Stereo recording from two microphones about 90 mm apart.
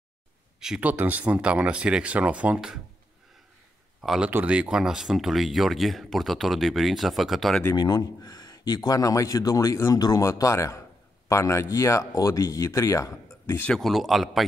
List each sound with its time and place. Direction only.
0.6 s speech: 5° right (ahead or behind)
0.8 s speech: 20° right (ahead or behind)
4.0 s speech: 5° right (ahead or behind)
4.3 s speech: 15° right (ahead or behind); by 7.6 s centre (ahead or behind)
7.7 s a man's voice: 45° left (ahead or behind)
13.7 s speech: centre (ahead or behind)